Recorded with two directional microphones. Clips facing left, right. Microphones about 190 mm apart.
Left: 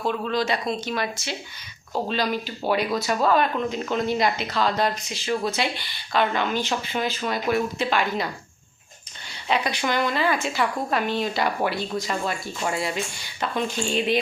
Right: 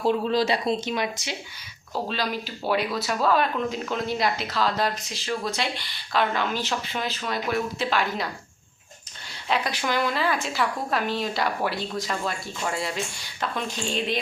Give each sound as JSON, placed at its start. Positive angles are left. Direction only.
{"t": 0.0, "sound": "speech", "side_deg": -30}
{"t": 2.0, "sound": "speech", "side_deg": 0}
{"t": 9.5, "sound": "speech", "side_deg": 0}